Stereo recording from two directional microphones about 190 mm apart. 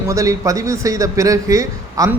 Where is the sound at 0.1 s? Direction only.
15° right (ahead or behind).